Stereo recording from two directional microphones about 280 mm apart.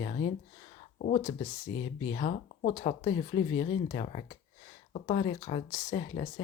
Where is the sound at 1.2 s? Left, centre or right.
Centre.